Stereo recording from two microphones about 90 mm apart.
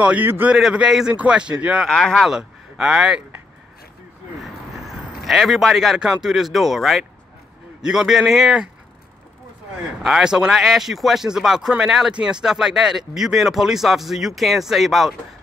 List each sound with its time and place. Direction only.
0.0 s speech: 20° right (ahead or behind)
0.6 s speech: 5° right (ahead or behind)
1.9 s speech: 5° left (ahead or behind)
4.7 s a man's voice: centre (ahead or behind)
10.0 s speech: 5° right (ahead or behind)